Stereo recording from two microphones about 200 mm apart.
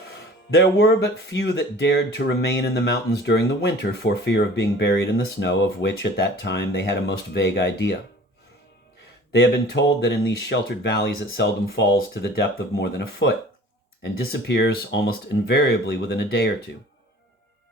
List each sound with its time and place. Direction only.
0.5 s speech: 60° left (ahead or behind)
9.3 s speech: 60° left (ahead or behind)